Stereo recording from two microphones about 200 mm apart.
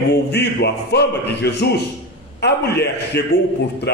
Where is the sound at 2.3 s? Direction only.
55° left (ahead or behind).